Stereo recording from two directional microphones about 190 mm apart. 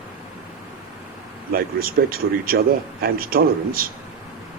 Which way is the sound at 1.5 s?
50° right (ahead or behind).